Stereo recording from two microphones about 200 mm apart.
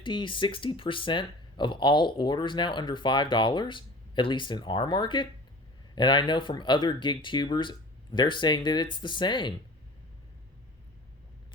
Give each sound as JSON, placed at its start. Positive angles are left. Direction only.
{"t": 0.0, "sound": "speech", "side_deg": 25}